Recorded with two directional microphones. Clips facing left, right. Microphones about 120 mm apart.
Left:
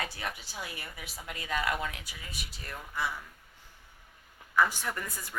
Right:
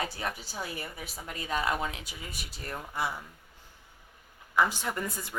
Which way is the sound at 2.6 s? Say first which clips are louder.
Right 2 dB; 35° right (ahead or behind).